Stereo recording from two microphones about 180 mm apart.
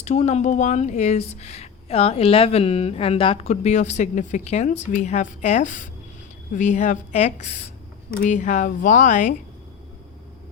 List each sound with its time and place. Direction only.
0.0 s speech: 40° left (ahead or behind)